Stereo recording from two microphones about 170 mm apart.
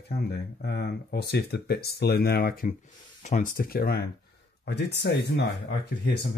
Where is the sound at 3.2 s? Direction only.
50° left (ahead or behind); by 4.0 s 65° left (ahead or behind).